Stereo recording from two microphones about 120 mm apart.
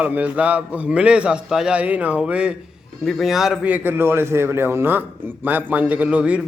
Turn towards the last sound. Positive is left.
turn(degrees=-10)  # may be behind; listen again after turning